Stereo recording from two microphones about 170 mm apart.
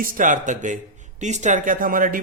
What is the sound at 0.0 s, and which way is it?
Speech, 50° right (ahead or behind).